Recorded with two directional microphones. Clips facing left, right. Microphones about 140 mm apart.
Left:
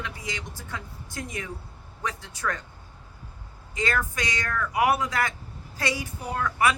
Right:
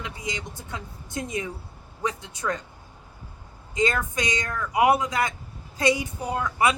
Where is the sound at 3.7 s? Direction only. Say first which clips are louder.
Right 3 dB; 20° right (ahead or behind).